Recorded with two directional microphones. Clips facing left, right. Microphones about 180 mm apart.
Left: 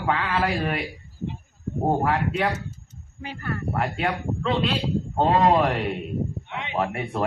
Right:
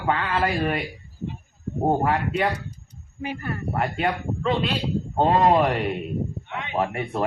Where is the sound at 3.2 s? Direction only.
15° right (ahead or behind).